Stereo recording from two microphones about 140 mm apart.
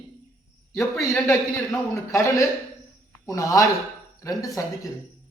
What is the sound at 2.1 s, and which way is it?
A man's voice, 20° left (ahead or behind).